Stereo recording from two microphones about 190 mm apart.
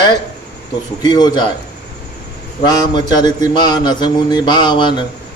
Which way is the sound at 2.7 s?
20° left (ahead or behind).